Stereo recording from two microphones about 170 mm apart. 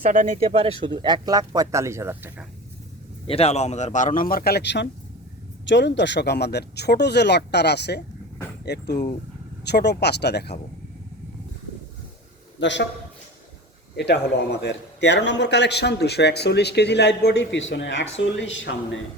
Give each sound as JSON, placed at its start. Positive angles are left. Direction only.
{"t": 0.0, "sound": "speech", "side_deg": -50}
{"t": 0.4, "sound": "speech", "side_deg": -35}
{"t": 3.2, "sound": "a man's voice", "side_deg": 35}
{"t": 12.5, "sound": "a man's voice", "side_deg": 90}
{"t": 13.9, "sound": "speech", "side_deg": 85}